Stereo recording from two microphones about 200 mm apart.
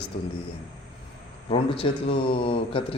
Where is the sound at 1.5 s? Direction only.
25° left (ahead or behind).